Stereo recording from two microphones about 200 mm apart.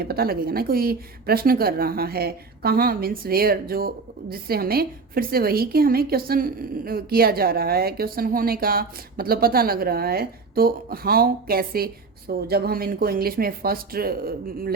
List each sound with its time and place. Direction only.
0.0 s a woman's voice: 50° right (ahead or behind)